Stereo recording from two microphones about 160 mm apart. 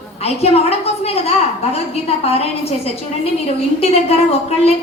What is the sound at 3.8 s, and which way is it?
Speech, 40° left (ahead or behind).